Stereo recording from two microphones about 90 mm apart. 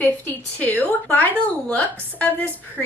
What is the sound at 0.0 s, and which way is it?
A woman's voice, 20° left (ahead or behind).